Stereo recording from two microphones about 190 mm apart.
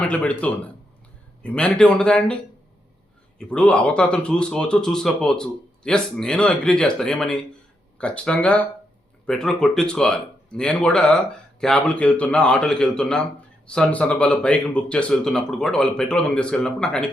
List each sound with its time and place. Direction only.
0.0 s a man's voice: 5° left (ahead or behind)
3.3 s speech: 5° left (ahead or behind)